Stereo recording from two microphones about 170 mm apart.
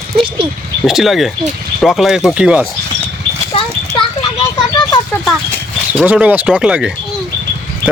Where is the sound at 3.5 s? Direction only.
30° left (ahead or behind).